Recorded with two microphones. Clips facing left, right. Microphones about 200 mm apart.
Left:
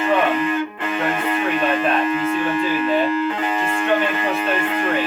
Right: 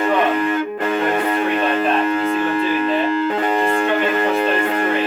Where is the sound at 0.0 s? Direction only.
40° right (ahead or behind).